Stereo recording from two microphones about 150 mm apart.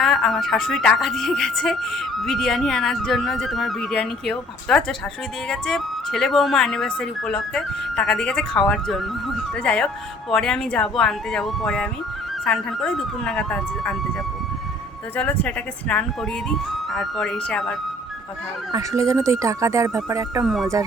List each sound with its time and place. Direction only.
0.0 s a woman's voice: centre (ahead or behind)
15.1 s a woman's voice: 10° left (ahead or behind)
18.7 s speech: 20° right (ahead or behind)
20.4 s a woman's voice: centre (ahead or behind)